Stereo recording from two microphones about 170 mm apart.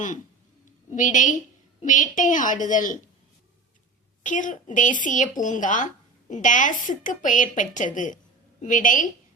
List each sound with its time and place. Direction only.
0.9 s a woman's voice: 50° left (ahead or behind)
4.2 s a woman's voice: 50° left (ahead or behind)